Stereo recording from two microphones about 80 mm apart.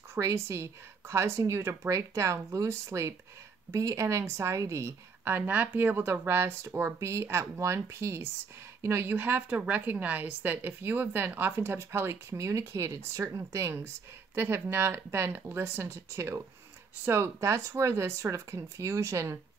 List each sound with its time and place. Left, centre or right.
0.1 s a woman's voice: right